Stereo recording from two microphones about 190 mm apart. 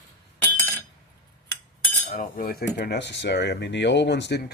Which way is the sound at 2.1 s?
45° left (ahead or behind).